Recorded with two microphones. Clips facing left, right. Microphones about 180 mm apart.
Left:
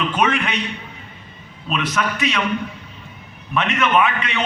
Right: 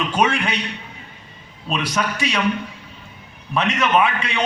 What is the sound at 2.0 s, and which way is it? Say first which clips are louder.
Speech: left 1 dB; 30° right (ahead or behind).